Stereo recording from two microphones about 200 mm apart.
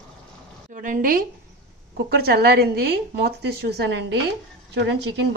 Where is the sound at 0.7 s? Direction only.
40° right (ahead or behind).